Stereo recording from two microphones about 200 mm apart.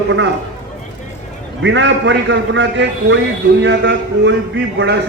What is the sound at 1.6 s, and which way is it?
A man's voice, 65° right (ahead or behind).